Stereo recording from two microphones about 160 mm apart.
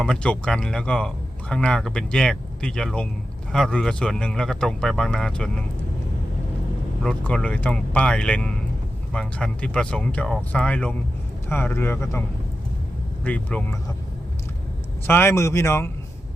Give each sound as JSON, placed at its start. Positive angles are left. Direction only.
{"t": 0.0, "sound": "speech", "side_deg": 5}
{"t": 7.0, "sound": "speech", "side_deg": 5}
{"t": 13.2, "sound": "speech", "side_deg": 10}
{"t": 15.0, "sound": "speech", "side_deg": 15}